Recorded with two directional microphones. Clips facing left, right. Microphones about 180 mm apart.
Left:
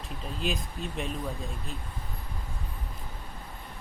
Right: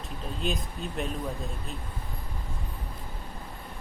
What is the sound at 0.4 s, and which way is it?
Speech, centre (ahead or behind).